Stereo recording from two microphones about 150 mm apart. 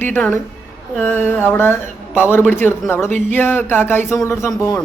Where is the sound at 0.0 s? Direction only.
10° left (ahead or behind).